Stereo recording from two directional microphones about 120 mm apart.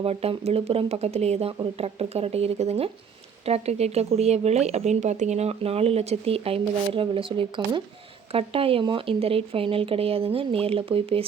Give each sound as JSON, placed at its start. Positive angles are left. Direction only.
{"t": 0.0, "sound": "speech", "side_deg": -55}